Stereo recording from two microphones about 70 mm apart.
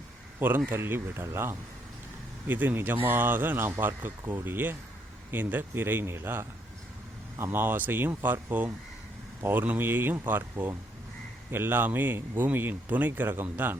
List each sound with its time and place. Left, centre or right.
0.3 s speech: right
2.5 s speech: right